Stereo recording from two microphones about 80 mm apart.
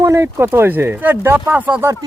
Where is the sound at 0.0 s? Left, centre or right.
Right.